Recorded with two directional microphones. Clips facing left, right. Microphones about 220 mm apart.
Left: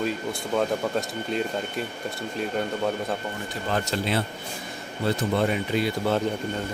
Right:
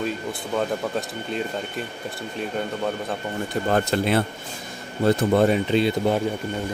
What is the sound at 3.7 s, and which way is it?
Speech, 50° right (ahead or behind).